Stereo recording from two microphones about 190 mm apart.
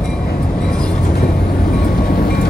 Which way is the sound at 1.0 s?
50° left (ahead or behind).